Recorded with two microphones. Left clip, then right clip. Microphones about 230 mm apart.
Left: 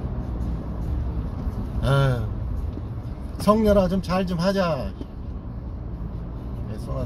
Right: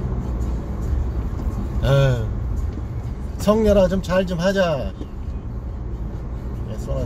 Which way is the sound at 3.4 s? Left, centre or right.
Centre.